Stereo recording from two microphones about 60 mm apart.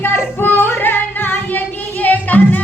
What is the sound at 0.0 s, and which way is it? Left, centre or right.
Music, left.